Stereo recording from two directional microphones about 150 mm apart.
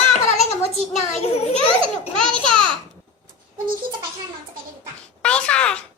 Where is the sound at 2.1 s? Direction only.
5° left (ahead or behind).